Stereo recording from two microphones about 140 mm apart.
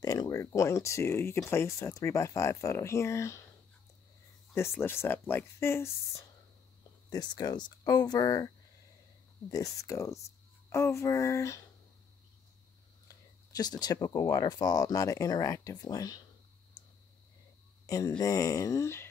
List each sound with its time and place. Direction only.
0.0 s speech: 25° left (ahead or behind)
4.6 s speech: 15° left (ahead or behind)
7.1 s speech: 30° left (ahead or behind)
9.5 s speech: 25° left (ahead or behind)
13.1 s speech: 25° left (ahead or behind)
17.8 s speech: 25° left (ahead or behind)